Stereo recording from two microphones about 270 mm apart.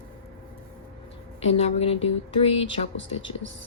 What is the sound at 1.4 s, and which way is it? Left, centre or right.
Speech, left.